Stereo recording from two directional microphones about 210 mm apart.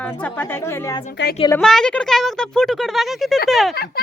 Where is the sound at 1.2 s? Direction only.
55° left (ahead or behind).